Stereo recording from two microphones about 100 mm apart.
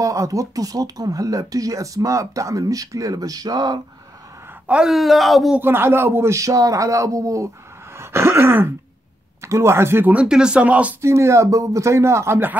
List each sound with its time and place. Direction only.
0.0 s speech: 35° right (ahead or behind)
4.6 s speech: 5° right (ahead or behind)
5.6 s speech: 20° right (ahead or behind)
8.0 s a sound: 25° right (ahead or behind)
9.4 s speech: 30° right (ahead or behind)
10.2 s speech: 10° right (ahead or behind)
11.0 s speech: 30° right (ahead or behind)